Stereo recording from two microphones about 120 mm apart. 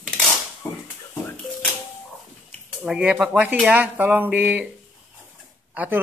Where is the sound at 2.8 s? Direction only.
10° right (ahead or behind).